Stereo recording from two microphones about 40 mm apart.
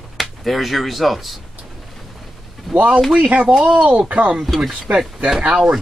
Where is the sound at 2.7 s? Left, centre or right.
Right.